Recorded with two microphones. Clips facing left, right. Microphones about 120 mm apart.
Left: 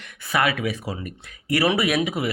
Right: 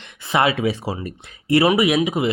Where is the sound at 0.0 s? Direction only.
25° right (ahead or behind).